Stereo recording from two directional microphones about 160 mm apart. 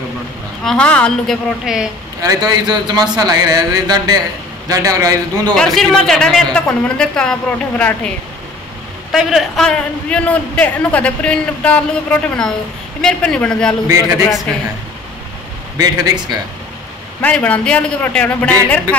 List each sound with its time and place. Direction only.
0.7 s a man's voice: 5° left (ahead or behind)
2.2 s speech: 25° right (ahead or behind)
5.8 s a man's voice: 5° left (ahead or behind)
9.1 s a man's voice: centre (ahead or behind)
15.8 s speech: 25° right (ahead or behind)
17.2 s speech: 10° left (ahead or behind)